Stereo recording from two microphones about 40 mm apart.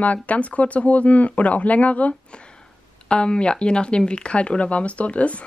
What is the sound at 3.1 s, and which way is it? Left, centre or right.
Speech, left.